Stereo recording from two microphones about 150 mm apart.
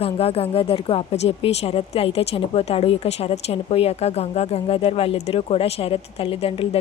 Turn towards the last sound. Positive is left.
turn(degrees=40)  # may be behind; listen again after turning